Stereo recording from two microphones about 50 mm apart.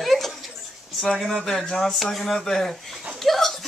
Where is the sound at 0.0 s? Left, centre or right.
Centre.